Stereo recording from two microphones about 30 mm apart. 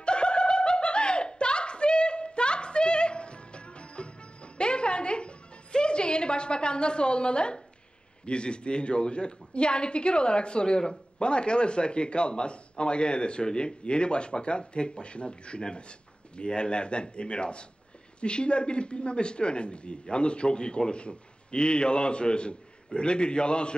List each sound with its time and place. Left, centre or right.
0.0 s snicker: left
8.3 s a woman's voice: left